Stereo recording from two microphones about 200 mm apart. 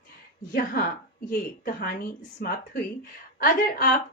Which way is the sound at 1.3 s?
45° left (ahead or behind).